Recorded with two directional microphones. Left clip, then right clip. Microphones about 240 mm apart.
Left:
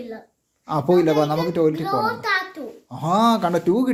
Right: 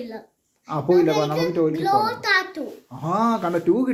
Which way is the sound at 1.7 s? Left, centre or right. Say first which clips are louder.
Right 2 dB; centre.